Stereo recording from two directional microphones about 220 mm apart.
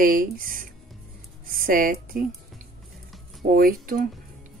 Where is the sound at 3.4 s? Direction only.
40° right (ahead or behind).